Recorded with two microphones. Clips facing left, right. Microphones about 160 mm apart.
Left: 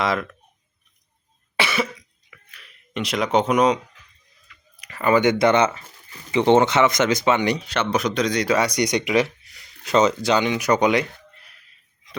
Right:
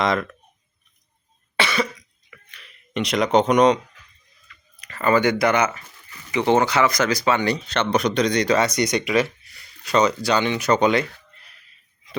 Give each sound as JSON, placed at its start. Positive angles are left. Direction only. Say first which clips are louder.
{"t": 0.0, "sound": "speech", "louder": "right 1 dB", "side_deg": 5}
{"t": 1.5, "sound": "cough", "louder": "right 1 dB", "side_deg": 5}
{"t": 2.3, "sound": "a sound", "louder": "right 2 dB", "side_deg": 0}
{"t": 4.4, "sound": "speech", "louder": "right 1 dB", "side_deg": 15}